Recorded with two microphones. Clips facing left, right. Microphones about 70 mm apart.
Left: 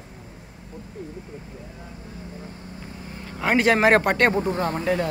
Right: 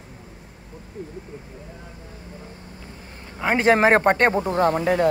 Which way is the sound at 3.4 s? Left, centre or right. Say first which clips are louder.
Right 1 dB; right.